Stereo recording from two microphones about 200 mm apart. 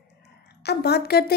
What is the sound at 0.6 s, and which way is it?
Speech, 55° left (ahead or behind).